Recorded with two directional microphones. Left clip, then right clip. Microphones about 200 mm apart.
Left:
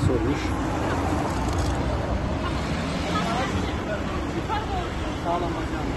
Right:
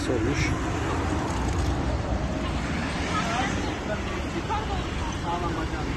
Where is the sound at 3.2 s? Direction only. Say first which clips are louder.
Even; 55° left (ahead or behind).